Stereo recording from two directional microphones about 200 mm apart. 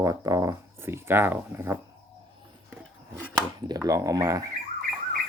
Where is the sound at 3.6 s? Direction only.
20° right (ahead or behind).